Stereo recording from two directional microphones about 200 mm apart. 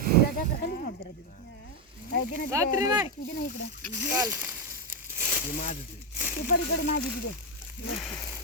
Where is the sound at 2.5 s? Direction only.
15° right (ahead or behind).